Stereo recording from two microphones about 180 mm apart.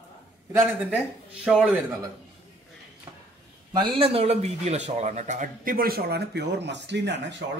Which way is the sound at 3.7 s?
30° right (ahead or behind).